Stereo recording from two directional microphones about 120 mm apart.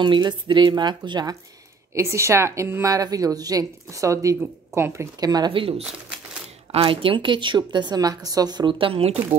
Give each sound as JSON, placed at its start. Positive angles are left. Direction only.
{"t": 0.0, "sound": "a woman's voice", "side_deg": -40}
{"t": 2.0, "sound": "a woman's voice", "side_deg": -25}
{"t": 5.2, "sound": "a woman's voice", "side_deg": -35}
{"t": 5.5, "sound": "a woman's voice", "side_deg": -50}